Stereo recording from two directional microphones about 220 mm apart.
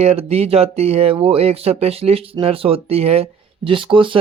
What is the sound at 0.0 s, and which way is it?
Speech, 30° right (ahead or behind).